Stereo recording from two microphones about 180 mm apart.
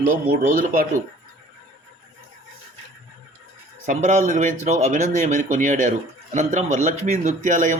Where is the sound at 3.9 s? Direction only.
45° right (ahead or behind).